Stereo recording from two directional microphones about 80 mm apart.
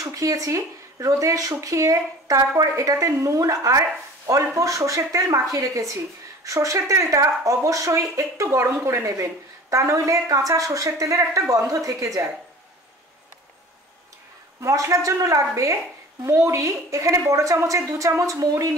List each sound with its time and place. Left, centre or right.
0.0 s a woman's voice: right
14.6 s a woman's voice: right